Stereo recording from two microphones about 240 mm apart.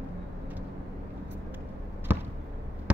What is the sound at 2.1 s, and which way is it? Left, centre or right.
Basketball bounce, centre.